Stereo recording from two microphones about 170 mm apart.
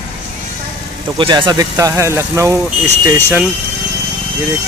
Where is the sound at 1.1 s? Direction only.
30° right (ahead or behind); by 3.5 s 10° right (ahead or behind).